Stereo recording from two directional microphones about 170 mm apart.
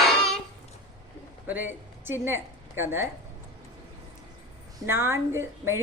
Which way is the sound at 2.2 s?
15° right (ahead or behind).